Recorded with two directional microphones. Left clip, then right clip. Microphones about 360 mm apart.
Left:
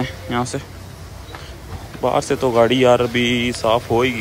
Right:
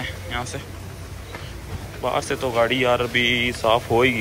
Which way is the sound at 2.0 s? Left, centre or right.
Centre.